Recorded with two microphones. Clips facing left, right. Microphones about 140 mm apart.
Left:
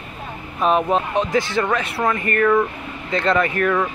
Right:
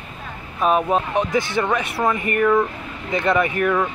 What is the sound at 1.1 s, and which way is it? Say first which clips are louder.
Speech: left 1 dB; 20° right (ahead or behind).